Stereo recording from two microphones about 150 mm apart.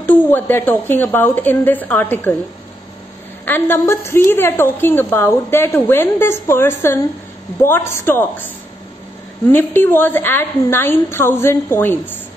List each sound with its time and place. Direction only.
0.0 s a woman's voice: 15° left (ahead or behind)
3.4 s a woman's voice: 15° left (ahead or behind)
9.5 s a woman's voice: 15° left (ahead or behind)